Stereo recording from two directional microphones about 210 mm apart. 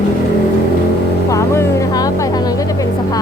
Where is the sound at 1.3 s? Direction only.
15° left (ahead or behind).